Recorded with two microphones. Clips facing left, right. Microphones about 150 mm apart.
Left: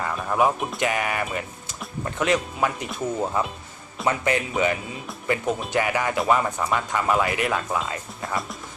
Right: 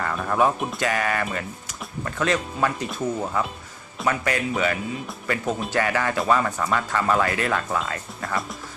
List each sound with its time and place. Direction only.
0.0 s speech: 10° left (ahead or behind)
0.8 s speech: 20° left (ahead or behind)